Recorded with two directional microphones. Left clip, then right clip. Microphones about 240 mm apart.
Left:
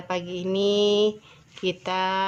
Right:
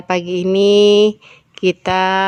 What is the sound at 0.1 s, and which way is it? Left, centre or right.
Mantra, right.